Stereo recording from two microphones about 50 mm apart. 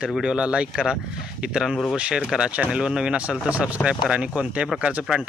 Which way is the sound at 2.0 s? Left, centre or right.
Right.